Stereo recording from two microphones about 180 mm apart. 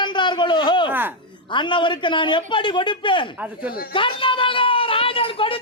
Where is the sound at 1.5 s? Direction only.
25° left (ahead or behind).